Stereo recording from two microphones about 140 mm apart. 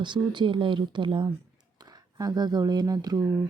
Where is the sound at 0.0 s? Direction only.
35° right (ahead or behind).